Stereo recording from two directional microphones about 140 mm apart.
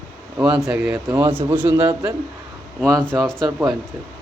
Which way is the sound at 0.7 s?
10° right (ahead or behind).